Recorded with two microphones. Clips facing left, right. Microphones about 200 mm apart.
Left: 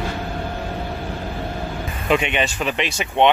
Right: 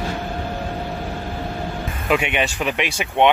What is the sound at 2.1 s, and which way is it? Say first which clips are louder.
Speech: left 1 dB; 10° right (ahead or behind).